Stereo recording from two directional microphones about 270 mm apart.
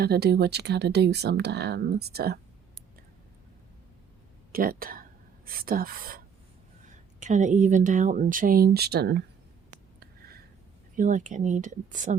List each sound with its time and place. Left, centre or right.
0.0 s speech: right
4.5 s speech: right
10.0 s a sound: right
10.9 s speech: right